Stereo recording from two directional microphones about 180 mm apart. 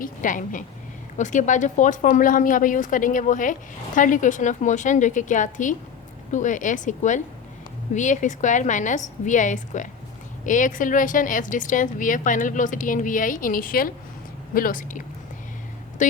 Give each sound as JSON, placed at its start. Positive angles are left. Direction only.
{"t": 0.0, "sound": "speech", "side_deg": 45}